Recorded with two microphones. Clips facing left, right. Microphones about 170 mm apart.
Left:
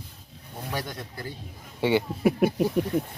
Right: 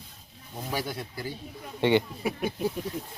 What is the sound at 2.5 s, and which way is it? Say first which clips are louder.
Speech: left 6 dB; 65° left (ahead or behind).